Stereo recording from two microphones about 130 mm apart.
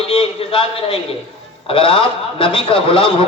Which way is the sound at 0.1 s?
45° left (ahead or behind).